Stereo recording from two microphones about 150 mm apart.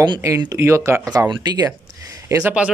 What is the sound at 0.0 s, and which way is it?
Speech, 25° right (ahead or behind).